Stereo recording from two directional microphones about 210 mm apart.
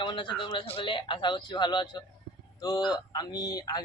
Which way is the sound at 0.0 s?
25° left (ahead or behind).